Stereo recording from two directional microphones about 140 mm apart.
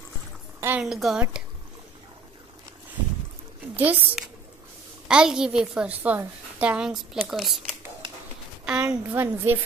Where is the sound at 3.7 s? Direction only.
10° right (ahead or behind).